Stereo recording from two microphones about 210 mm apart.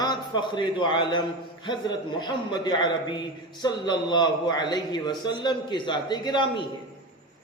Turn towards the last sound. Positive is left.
turn(degrees=20)  # may be behind; listen again after turning